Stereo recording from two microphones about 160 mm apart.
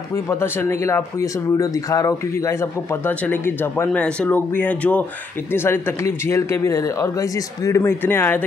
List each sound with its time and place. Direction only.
0.1 s speech: 15° left (ahead or behind)